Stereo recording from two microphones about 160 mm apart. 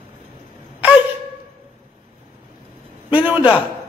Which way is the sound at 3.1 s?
10° right (ahead or behind).